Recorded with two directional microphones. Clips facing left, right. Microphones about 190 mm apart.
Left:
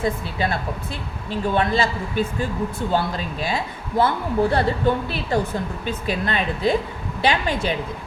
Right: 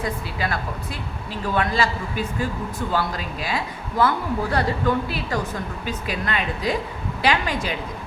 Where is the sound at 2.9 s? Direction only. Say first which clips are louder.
Left 1 dB; 25° left (ahead or behind).